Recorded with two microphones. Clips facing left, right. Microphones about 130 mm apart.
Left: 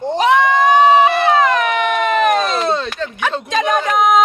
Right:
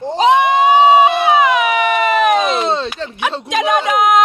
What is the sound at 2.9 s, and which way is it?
Speech, 30° right (ahead or behind).